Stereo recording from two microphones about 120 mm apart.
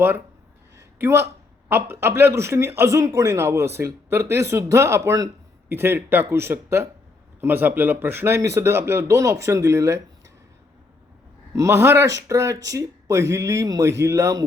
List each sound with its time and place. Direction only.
0.8 s a sound: 20° right (ahead or behind)
1.7 s speech: 20° right (ahead or behind)
11.5 s speech: 25° right (ahead or behind)